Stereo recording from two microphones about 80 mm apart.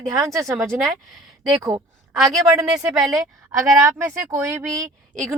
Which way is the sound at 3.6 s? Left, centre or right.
Right.